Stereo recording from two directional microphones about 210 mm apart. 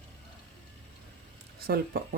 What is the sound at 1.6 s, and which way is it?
Speech, 45° right (ahead or behind).